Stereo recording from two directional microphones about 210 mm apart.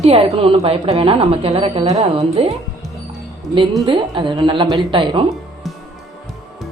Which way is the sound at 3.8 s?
20° right (ahead or behind).